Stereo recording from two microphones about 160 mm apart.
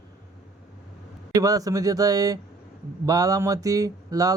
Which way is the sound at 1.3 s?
20° right (ahead or behind).